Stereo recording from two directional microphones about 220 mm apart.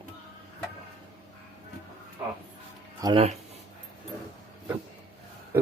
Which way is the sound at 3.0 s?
25° right (ahead or behind).